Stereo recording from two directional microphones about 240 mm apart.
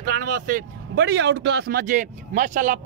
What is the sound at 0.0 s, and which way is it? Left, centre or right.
Speech, right.